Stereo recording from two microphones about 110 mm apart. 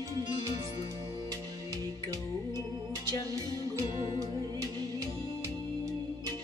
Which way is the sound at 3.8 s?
45° left (ahead or behind).